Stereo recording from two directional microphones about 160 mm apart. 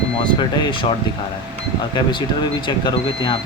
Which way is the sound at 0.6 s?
30° left (ahead or behind).